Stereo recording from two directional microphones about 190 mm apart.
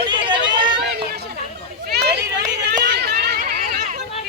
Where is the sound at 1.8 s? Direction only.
60° right (ahead or behind).